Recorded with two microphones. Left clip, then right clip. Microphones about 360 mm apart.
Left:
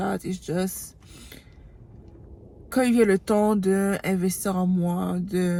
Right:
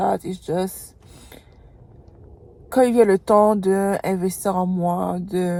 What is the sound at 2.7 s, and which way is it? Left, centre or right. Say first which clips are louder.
A woman's voice: right 5 dB; right.